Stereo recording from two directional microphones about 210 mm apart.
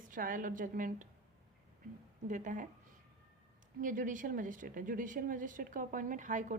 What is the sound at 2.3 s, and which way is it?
Speech, 40° right (ahead or behind).